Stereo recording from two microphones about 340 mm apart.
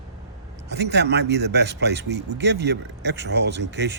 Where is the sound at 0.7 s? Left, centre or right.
Right.